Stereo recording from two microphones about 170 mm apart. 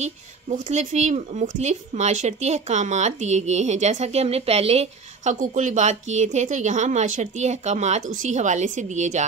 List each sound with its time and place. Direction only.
0.0 s speech: 40° right (ahead or behind)